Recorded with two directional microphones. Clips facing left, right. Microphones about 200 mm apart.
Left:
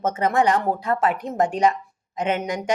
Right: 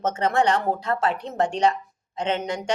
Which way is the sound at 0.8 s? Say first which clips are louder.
Left 2 dB; 10° left (ahead or behind).